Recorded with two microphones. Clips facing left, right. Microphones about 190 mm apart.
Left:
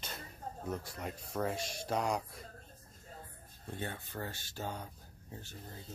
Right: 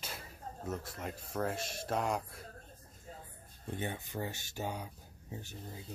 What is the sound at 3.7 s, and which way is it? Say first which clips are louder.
Speech: right 3 dB; 15° right (ahead or behind).